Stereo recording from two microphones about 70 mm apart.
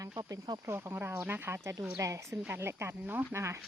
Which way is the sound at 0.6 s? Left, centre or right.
Right.